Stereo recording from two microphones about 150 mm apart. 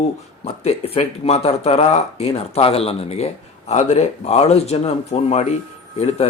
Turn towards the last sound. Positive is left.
turn(degrees=45)  # may be behind; listen again after turning